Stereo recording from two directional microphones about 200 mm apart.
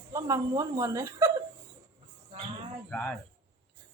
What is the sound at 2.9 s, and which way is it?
Speech, 10° left (ahead or behind).